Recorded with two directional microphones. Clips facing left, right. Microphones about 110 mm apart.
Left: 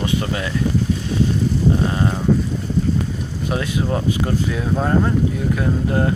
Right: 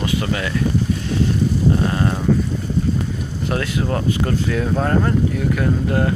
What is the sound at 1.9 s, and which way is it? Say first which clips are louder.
Livestock: even; 15° left (ahead or behind).